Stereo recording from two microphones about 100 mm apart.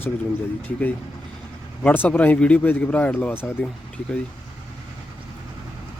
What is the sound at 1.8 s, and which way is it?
Speech, 15° left (ahead or behind).